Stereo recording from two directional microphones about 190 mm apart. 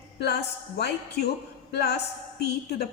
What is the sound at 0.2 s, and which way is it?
A woman's voice, 60° left (ahead or behind).